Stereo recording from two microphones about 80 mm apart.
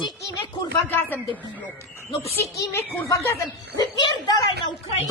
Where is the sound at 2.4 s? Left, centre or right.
Left.